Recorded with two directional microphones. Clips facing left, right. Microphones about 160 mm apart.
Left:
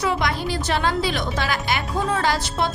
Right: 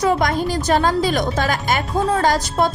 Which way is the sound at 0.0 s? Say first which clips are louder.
Right 5 dB; 45° right (ahead or behind).